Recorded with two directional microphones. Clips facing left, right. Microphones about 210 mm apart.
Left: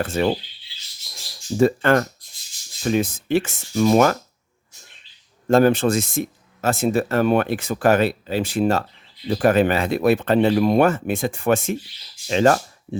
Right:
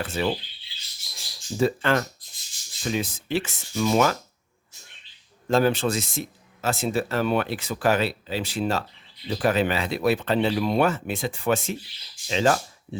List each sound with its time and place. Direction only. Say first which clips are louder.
0.0 s speech: left 5 dB; 45° left (ahead or behind)
1.5 s speech: left 6 dB; 50° left (ahead or behind)
5.5 s speech: left 6 dB; 50° left (ahead or behind)